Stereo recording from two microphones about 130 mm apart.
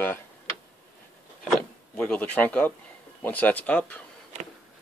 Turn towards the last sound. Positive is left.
turn(degrees=10)  # may be behind; listen again after turning